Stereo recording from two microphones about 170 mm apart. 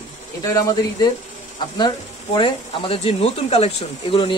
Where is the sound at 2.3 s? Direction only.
30° left (ahead or behind).